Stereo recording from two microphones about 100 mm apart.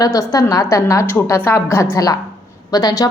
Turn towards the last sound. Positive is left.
turn(degrees=40)  # may be behind; listen again after turning